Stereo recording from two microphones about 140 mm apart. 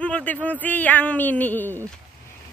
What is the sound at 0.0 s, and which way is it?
Speech, 10° left (ahead or behind).